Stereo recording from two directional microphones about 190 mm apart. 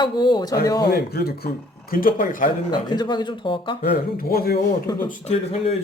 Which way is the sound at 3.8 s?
55° left (ahead or behind).